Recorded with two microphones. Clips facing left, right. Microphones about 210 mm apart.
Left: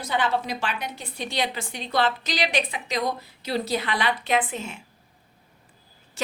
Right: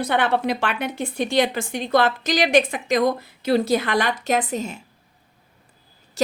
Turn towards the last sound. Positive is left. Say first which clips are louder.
# right 8 dB
turn(degrees=-40)  # may be behind; listen again after turning